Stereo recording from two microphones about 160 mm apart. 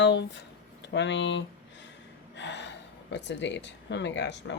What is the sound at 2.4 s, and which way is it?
Speech, 90° left.